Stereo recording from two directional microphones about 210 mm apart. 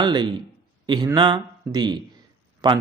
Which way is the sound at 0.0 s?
20° right (ahead or behind).